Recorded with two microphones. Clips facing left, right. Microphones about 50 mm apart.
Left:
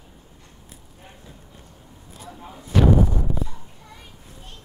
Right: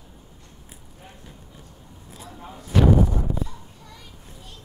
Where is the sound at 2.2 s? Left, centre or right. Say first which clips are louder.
Left 1 dB; centre.